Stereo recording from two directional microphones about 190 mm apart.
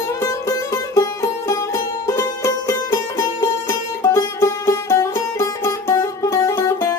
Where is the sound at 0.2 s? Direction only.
20° left (ahead or behind).